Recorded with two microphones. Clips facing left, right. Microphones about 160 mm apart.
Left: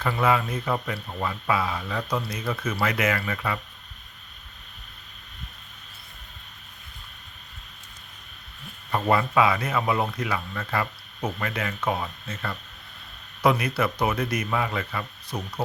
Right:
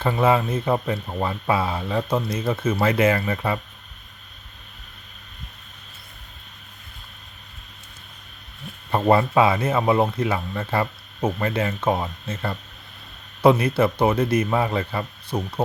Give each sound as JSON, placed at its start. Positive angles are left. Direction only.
{"t": 0.0, "sound": "speech", "side_deg": -25}
{"t": 8.9, "sound": "speech", "side_deg": -30}